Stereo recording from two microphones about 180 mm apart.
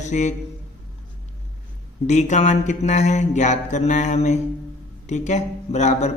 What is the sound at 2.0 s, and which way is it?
Speech, 40° left (ahead or behind).